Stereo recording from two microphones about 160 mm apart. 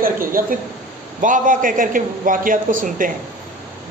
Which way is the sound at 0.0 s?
60° right (ahead or behind).